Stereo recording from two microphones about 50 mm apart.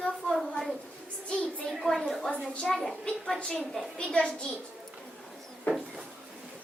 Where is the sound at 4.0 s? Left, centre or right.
Centre.